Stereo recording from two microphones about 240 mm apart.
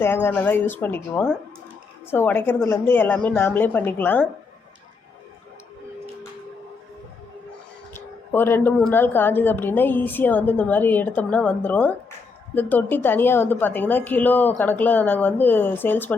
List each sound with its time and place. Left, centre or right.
0.0 s speech: centre
7.9 s speech: centre